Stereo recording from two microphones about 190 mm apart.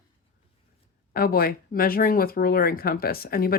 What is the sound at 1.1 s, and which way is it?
Speech, 50° left (ahead or behind).